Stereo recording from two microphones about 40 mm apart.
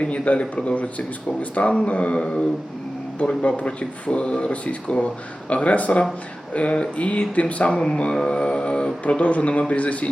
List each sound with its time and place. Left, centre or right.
0.0 s speech: left
1.7 s speech: left